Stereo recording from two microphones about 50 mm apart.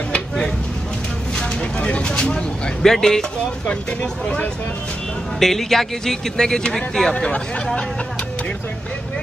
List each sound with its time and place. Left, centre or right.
1.8 s a sound: left
2.8 s speech: centre
5.4 s speech: centre; by 7.8 s left